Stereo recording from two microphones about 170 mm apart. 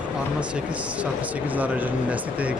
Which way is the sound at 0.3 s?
5° right (ahead or behind).